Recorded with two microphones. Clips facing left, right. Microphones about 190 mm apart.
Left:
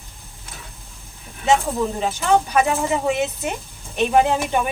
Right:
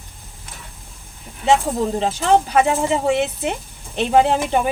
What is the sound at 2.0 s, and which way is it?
Speech, 30° right (ahead or behind).